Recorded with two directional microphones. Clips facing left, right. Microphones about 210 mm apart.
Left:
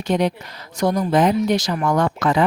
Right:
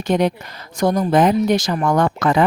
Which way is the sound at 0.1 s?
50° right (ahead or behind).